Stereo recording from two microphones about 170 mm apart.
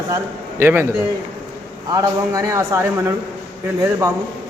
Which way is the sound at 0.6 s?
15° right (ahead or behind).